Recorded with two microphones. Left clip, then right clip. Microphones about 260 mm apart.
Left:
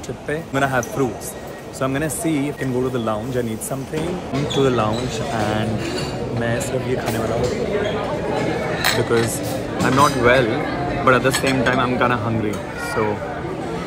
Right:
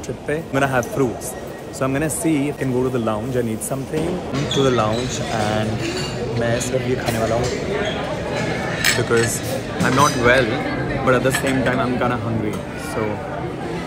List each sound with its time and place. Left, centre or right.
0.3 s speech: centre
4.6 s speech: centre
9.1 s speech: centre